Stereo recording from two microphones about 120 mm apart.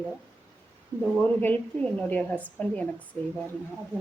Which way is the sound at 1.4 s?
15° left (ahead or behind).